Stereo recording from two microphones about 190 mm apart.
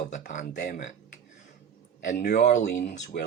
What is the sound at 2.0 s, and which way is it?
Speech, 50° left (ahead or behind).